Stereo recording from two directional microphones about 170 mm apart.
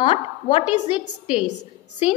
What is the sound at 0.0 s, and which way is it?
Speech, 30° left (ahead or behind).